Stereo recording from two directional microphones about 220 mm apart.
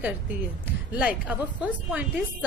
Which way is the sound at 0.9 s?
5° right (ahead or behind).